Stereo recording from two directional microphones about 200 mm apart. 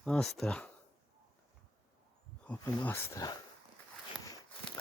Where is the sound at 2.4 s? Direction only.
10° left (ahead or behind).